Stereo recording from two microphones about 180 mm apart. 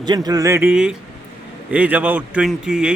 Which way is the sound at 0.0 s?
20° right (ahead or behind).